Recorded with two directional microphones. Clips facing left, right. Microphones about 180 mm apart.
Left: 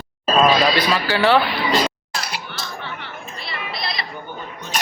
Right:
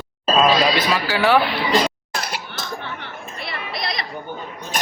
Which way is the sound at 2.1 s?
50° right (ahead or behind).